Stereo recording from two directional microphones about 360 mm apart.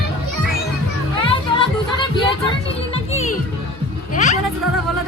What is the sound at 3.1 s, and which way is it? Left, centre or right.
Music, centre.